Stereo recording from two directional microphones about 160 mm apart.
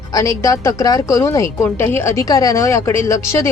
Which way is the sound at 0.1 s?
20° left (ahead or behind).